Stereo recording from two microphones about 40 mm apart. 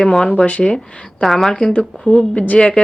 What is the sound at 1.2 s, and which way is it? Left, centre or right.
Speech, centre.